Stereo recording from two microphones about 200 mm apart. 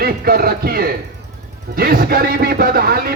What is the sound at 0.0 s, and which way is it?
A man's voice, 50° right (ahead or behind).